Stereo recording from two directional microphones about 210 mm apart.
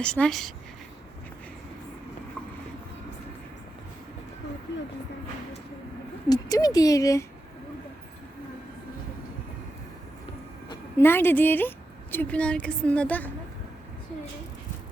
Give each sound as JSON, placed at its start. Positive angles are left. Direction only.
{"t": 0.0, "sound": "speech", "side_deg": 5}
{"t": 6.2, "sound": "a woman's voice", "side_deg": 20}
{"t": 10.7, "sound": "a woman's voice", "side_deg": 10}